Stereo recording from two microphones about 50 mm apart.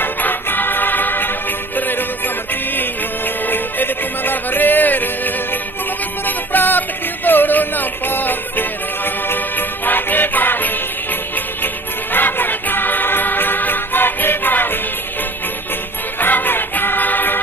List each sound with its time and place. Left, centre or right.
0.0 s music: left
16.2 s music: left